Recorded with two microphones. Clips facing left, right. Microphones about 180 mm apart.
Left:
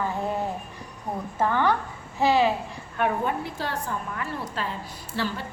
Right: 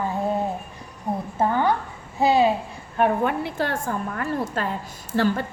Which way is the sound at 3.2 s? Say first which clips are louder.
Right 4 dB; 65° right (ahead or behind).